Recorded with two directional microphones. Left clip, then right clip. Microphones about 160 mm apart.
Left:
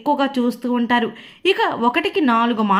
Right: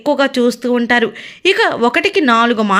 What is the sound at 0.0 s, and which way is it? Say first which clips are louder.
Speech: right 6 dB; 10° right (ahead or behind).